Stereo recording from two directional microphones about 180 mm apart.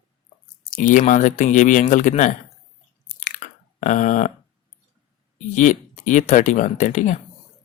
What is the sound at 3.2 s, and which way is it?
Chewing, 45° left (ahead or behind).